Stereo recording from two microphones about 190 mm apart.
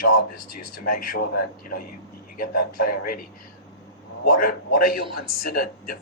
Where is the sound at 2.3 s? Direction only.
50° left (ahead or behind).